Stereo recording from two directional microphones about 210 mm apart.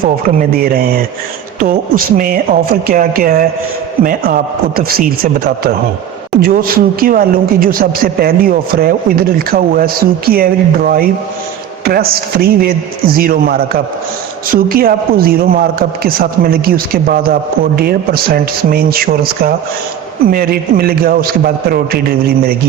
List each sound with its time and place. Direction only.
0.0 s a woman's voice: 45° right (ahead or behind)
4.8 s a woman's voice: 45° right (ahead or behind)